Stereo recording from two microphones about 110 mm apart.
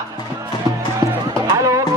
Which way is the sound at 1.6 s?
30° right (ahead or behind).